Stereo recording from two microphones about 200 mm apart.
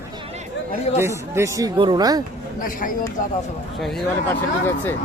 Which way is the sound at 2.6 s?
40° left (ahead or behind).